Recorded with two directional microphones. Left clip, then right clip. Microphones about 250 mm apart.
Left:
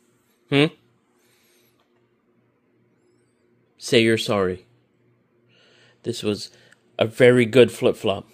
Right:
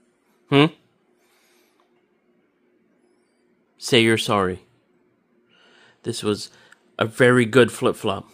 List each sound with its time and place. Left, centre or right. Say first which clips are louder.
0.5 s speech: right 2 dB; centre
3.7 s speech: right 1 dB; centre
5.5 s a sound: right 2 dB; centre
7.2 s speech: left 1 dB; centre